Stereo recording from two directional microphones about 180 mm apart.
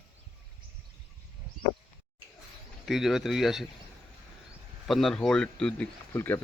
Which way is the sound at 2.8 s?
Centre (ahead or behind).